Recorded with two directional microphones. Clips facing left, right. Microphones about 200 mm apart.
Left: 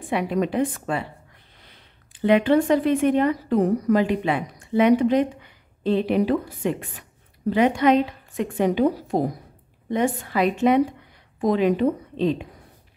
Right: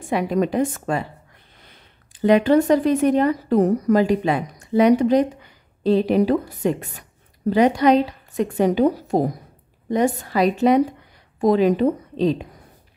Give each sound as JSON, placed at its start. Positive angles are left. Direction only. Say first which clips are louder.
{"t": 0.1, "sound": "speech", "louder": "right 3 dB", "side_deg": -40}
{"t": 2.1, "sound": "speech", "louder": "right 2 dB", "side_deg": -40}